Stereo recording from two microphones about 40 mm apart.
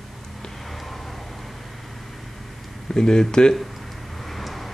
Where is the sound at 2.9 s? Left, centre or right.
Centre.